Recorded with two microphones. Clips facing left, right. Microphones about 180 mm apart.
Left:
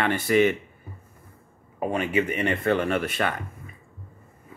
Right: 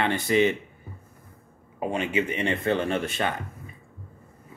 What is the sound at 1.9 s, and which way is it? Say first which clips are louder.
Speech: left 2 dB; 25° right (ahead or behind).